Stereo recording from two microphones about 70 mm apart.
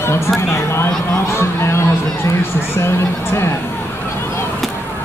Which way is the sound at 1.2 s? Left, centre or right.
Left.